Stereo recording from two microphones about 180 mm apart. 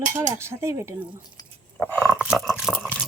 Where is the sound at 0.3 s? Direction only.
15° right (ahead or behind).